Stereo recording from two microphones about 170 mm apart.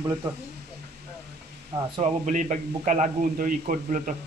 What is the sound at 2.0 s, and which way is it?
A man's voice, 45° right (ahead or behind).